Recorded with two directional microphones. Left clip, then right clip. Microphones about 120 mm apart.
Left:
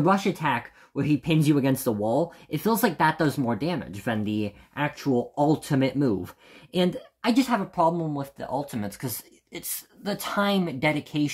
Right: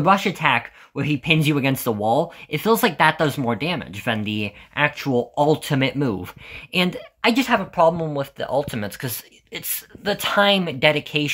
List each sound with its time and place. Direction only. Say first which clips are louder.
0.0 s speech: right 6 dB; 40° right (ahead or behind)
4.7 s speech: right 6 dB; 40° right (ahead or behind)